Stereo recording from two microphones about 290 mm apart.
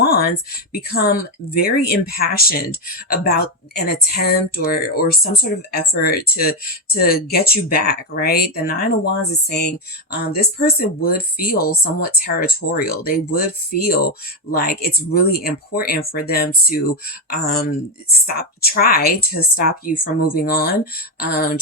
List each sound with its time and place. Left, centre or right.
0.0 s speech: left